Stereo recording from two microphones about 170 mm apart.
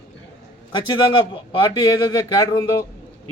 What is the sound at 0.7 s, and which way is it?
A man's voice, 25° left (ahead or behind).